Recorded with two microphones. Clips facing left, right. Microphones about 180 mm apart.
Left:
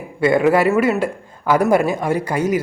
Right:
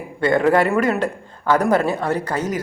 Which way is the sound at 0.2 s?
10° left (ahead or behind).